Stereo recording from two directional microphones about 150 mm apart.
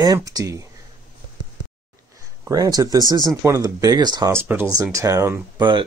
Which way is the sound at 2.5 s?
25° right (ahead or behind).